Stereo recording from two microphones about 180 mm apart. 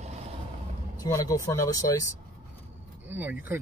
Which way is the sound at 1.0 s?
20° left (ahead or behind).